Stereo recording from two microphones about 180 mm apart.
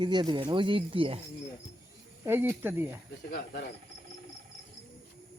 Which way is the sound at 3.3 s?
55° left (ahead or behind).